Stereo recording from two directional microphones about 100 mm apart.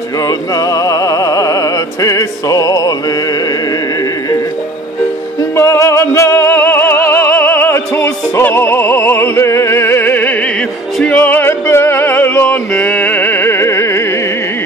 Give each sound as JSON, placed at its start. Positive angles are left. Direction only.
{"t": 0.6, "sound": "opera", "side_deg": 35}
{"t": 5.6, "sound": "music", "side_deg": 30}